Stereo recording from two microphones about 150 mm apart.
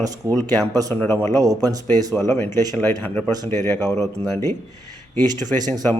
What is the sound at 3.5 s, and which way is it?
Speech, 15° left (ahead or behind).